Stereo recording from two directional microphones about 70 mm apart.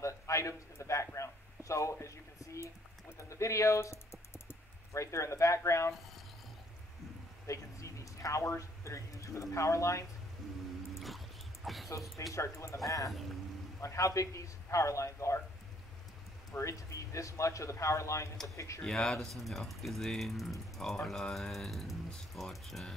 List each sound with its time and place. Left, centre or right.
0.0 s a sound: left
3.2 s speech: left
7.4 s speech: left
11.0 s dog: centre
12.4 s speech: left
16.5 s speech: left
18.9 s speech: centre